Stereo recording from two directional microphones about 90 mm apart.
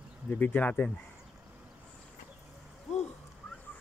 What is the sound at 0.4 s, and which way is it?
Speech, 20° left (ahead or behind).